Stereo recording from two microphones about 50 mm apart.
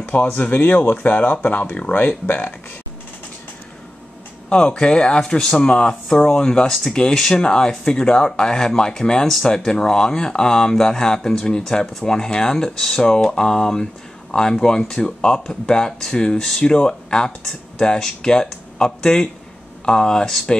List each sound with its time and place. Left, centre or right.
0.1 s speech: left
4.5 s speech: left